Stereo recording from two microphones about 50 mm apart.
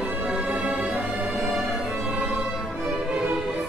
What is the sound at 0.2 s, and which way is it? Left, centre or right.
Music, centre.